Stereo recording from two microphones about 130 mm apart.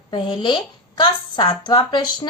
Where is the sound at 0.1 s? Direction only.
35° left (ahead or behind).